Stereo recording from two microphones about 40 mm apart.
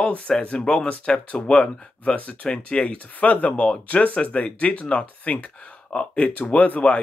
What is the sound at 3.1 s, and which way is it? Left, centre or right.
Speech, left.